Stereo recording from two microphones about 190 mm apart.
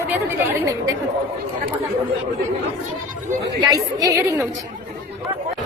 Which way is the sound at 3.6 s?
20° right (ahead or behind).